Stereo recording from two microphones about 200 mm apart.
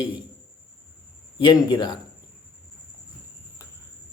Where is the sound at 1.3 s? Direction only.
20° left (ahead or behind).